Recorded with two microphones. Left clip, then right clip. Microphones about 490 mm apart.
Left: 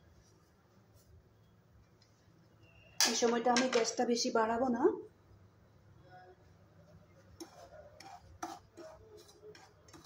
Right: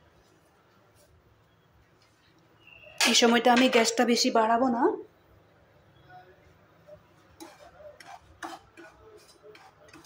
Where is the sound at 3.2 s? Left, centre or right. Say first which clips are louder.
Right 11 dB; centre.